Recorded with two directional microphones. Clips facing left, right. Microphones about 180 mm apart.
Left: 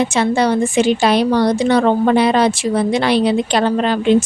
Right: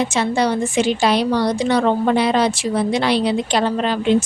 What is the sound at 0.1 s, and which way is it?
A woman's voice, 55° left (ahead or behind).